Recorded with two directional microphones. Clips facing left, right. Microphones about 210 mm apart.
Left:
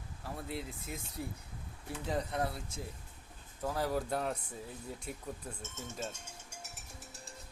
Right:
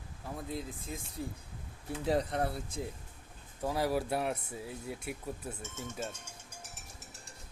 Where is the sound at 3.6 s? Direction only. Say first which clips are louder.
Right 3 dB; 10° right (ahead or behind).